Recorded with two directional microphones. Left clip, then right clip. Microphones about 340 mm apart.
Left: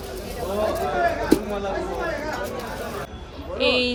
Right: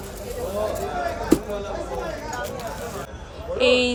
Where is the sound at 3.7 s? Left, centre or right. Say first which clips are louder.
Right 2 dB; centre.